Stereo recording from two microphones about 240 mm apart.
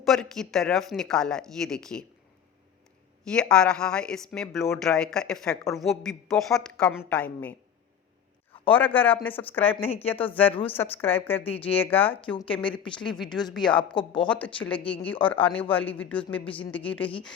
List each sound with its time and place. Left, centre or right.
0.0 s speech: centre
3.2 s speech: centre
8.8 s speech: centre
9.7 s a woman's voice: left
10.2 s speech: centre